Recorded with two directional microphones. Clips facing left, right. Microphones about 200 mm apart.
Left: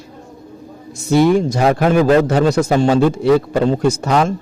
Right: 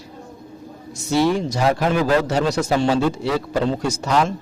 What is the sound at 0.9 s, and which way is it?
Speech, 55° left (ahead or behind).